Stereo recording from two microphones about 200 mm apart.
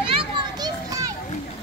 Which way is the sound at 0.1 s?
20° right (ahead or behind).